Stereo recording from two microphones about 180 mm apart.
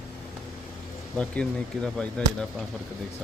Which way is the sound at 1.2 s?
5° left (ahead or behind).